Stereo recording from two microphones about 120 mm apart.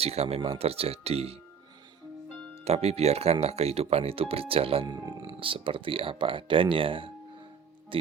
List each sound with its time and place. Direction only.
0.0 s speech: 60° right (ahead or behind)
2.6 s speech: 60° right (ahead or behind)
4.9 s speech: 30° right (ahead or behind)
5.4 s speech: 45° right (ahead or behind)